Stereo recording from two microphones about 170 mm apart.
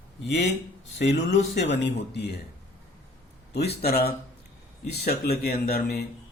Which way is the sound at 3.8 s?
65° left (ahead or behind).